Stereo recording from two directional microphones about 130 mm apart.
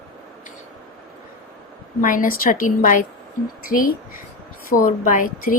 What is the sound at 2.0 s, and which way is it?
Speech, 90° left.